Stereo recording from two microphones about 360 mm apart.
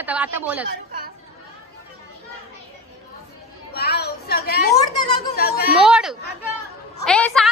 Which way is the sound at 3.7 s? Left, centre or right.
Left.